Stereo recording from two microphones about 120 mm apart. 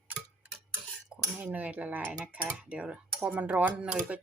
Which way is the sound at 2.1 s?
10° right (ahead or behind).